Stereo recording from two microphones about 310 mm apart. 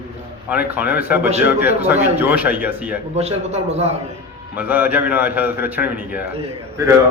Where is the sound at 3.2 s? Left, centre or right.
Right.